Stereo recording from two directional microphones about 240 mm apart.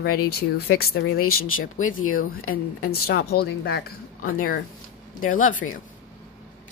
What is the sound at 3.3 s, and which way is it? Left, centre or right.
A woman's voice, left.